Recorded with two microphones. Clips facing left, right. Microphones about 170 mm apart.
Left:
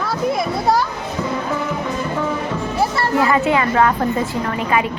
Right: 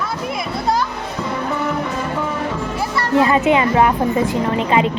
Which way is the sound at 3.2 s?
20° right (ahead or behind).